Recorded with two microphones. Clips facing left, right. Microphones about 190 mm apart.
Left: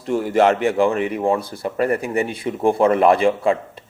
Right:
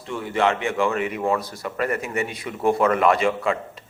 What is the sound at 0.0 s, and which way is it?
Speech, 40° left (ahead or behind).